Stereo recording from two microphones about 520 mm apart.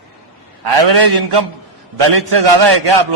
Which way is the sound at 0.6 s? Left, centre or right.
Right.